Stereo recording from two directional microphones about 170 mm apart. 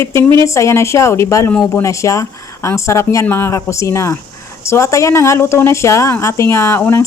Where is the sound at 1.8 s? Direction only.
20° left (ahead or behind).